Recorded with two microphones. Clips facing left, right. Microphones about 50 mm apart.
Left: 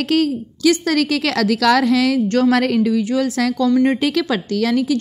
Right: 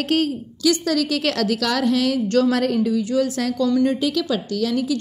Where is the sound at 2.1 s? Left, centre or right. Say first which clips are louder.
Left 2 dB; left.